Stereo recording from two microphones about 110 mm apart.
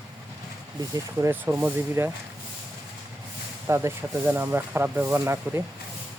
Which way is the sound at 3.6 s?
25° right (ahead or behind).